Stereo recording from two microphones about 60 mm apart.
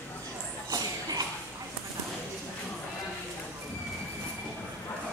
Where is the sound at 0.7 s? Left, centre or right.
Right.